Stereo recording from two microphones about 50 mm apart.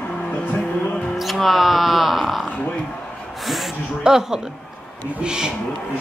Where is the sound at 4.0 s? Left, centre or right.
Centre.